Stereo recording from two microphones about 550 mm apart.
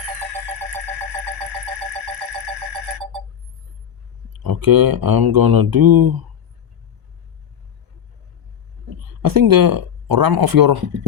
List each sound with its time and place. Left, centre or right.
4.3 s speech: right
9.2 s speech: right